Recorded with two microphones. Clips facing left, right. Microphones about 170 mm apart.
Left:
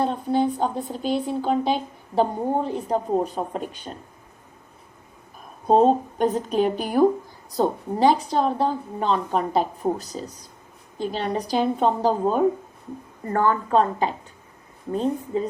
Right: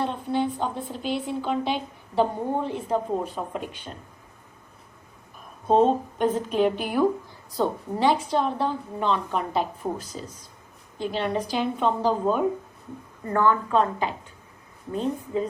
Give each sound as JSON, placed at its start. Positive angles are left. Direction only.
{"t": 0.0, "sound": "speech", "side_deg": 40}
{"t": 5.6, "sound": "speech", "side_deg": 40}